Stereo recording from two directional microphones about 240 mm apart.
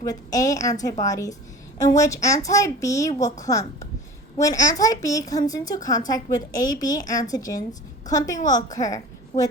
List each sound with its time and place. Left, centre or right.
0.0 s a woman's voice: centre